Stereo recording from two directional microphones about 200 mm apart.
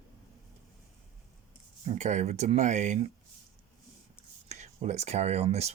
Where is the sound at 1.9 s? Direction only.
35° right (ahead or behind).